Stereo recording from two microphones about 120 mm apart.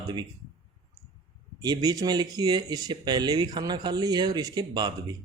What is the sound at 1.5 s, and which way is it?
Speech, 35° right (ahead or behind).